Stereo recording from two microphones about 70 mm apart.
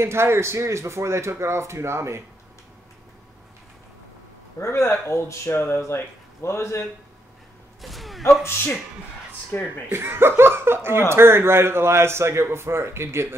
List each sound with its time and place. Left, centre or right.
0.0 s speech: right
4.6 s speech: left
7.8 s a sound: centre
9.5 s speech: left
9.9 s speech: right